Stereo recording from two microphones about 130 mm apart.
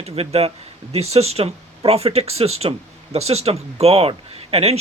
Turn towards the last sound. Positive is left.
turn(degrees=-50)  # may be behind; listen again after turning